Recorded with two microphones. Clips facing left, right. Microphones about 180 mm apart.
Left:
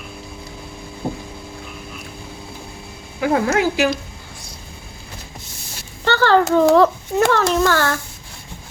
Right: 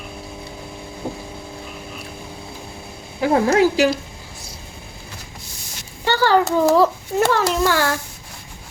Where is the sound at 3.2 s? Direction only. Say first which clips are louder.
Right 2 dB; 35° right (ahead or behind).